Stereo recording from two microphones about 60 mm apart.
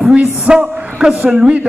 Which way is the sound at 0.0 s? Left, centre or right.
Centre.